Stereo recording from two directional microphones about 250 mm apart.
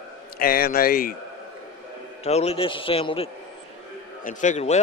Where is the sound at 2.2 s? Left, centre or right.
Left.